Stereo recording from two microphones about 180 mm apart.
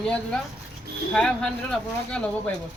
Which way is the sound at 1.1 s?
5° left (ahead or behind).